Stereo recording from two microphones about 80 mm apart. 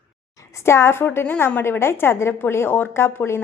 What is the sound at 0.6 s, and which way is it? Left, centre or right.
A woman's voice, left.